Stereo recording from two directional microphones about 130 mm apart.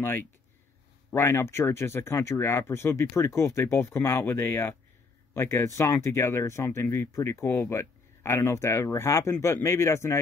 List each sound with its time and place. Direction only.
0.0 s speech: 20° left (ahead or behind)